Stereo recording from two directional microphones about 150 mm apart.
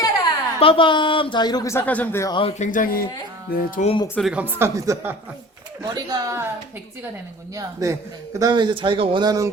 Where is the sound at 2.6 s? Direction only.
60° left (ahead or behind).